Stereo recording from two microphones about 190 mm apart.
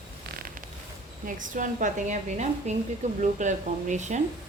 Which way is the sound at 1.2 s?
45° right (ahead or behind).